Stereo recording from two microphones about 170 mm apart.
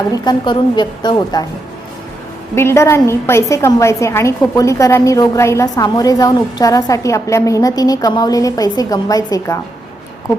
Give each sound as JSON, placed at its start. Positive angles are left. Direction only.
{"t": 0.3, "sound": "a woman's voice", "side_deg": 25}
{"t": 2.6, "sound": "a woman's voice", "side_deg": 15}